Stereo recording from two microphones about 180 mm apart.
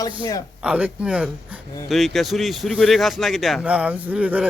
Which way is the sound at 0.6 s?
5° right (ahead or behind).